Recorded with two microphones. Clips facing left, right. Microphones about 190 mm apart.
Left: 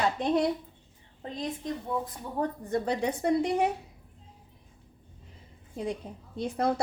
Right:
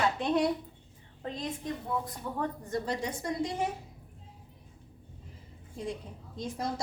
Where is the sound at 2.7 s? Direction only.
60° left (ahead or behind).